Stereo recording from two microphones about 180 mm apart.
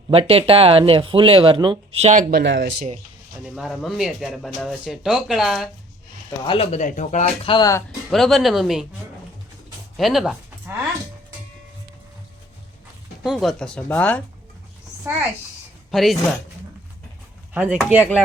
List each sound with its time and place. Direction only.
0.1 s speech: 30° right (ahead or behind)
2.3 s speech: 85° right
3.4 s speech: centre (ahead or behind)
6.4 s speech: 30° left (ahead or behind)
7.5 s speech: 20° left (ahead or behind)
8.1 s speech: centre (ahead or behind)
10.0 s speech: centre (ahead or behind)
13.2 s speech: centre (ahead or behind)
15.9 s speech: centre (ahead or behind)
17.5 s speech: 5° right (ahead or behind)